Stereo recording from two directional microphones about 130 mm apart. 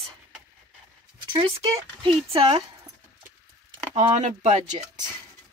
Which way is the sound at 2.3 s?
45° right (ahead or behind).